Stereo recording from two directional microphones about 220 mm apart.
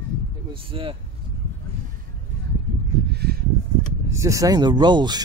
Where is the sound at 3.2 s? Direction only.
45° right (ahead or behind).